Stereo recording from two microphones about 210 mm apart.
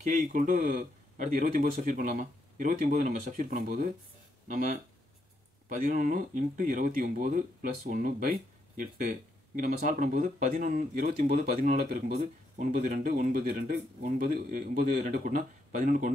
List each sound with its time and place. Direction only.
0.0 s speech: 35° right (ahead or behind)